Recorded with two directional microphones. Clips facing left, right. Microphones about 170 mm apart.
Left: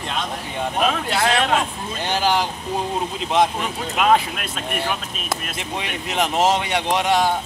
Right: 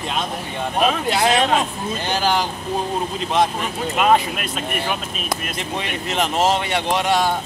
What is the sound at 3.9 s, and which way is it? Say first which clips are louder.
Speech: right 1 dB; centre (ahead or behind).